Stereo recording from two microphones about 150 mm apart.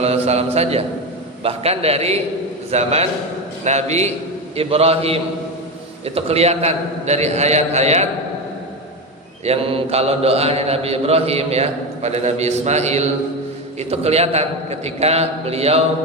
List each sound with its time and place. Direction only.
0.0 s a man's voice: 45° right (ahead or behind)
9.4 s a man's voice: 40° right (ahead or behind)